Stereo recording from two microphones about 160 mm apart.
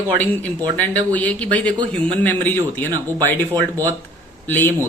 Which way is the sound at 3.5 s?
20° right (ahead or behind).